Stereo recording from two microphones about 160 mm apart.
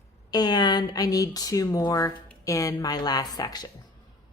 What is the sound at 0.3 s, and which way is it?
A woman's voice, 25° left (ahead or behind).